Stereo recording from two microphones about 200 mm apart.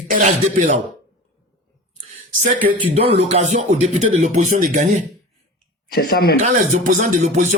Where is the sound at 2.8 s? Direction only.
30° right (ahead or behind).